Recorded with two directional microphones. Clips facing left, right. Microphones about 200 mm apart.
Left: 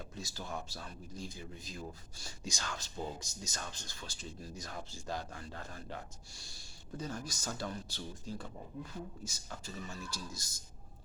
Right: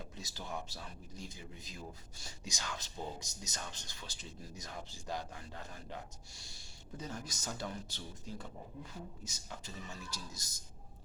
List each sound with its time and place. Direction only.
0.2 s speech: 20° right (ahead or behind)